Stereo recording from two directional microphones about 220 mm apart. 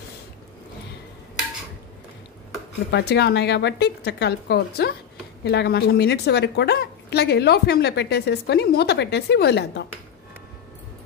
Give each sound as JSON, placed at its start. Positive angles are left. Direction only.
{"t": 2.9, "sound": "a woman's voice", "side_deg": 50}